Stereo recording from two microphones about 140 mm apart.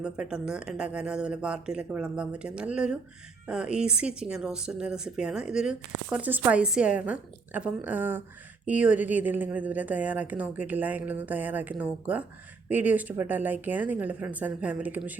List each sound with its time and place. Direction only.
0.0 s speech: 5° right (ahead or behind)